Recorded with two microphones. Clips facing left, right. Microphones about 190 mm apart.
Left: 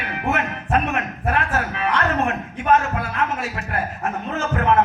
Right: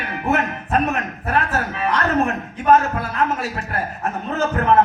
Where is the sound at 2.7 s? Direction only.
35° right (ahead or behind).